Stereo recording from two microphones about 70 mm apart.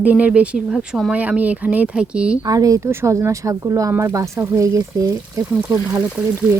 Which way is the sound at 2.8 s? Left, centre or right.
Right.